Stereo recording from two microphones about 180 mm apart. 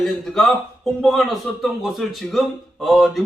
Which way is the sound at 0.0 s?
5° left (ahead or behind).